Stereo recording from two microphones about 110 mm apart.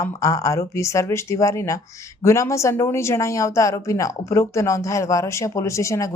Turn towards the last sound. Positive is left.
turn(degrees=25)  # may be behind; listen again after turning